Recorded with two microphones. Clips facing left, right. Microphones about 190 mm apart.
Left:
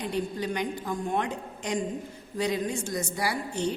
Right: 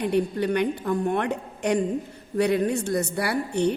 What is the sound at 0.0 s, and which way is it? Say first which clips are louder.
A woman's voice: right 7 dB; 60° right (ahead or behind).